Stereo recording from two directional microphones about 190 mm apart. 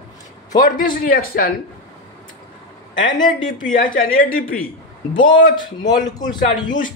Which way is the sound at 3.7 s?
45° left (ahead or behind).